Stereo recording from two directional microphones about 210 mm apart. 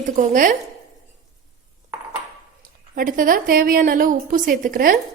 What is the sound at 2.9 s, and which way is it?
A woman's voice, 40° right (ahead or behind).